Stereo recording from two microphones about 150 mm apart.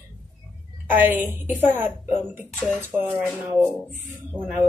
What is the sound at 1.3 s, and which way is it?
Speech, 15° right (ahead or behind).